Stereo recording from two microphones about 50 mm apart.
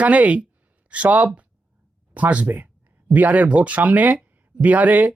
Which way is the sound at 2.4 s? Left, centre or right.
Right.